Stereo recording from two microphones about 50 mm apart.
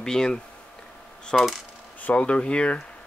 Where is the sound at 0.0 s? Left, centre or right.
Centre.